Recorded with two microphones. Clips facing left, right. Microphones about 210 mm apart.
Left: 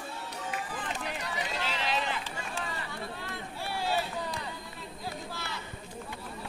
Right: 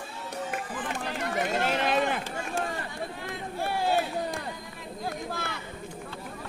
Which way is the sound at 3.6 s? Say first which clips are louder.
Right 5 dB; 50° right (ahead or behind).